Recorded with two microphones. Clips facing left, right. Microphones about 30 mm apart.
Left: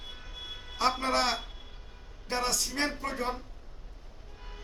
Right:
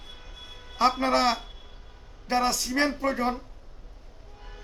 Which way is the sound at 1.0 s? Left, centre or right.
Centre.